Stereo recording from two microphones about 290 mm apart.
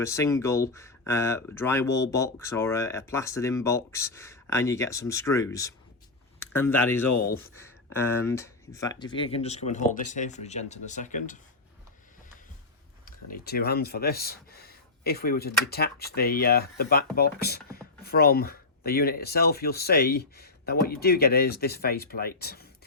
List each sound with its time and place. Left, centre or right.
0.0 s speech: centre; by 11.3 s left
13.3 s speech: left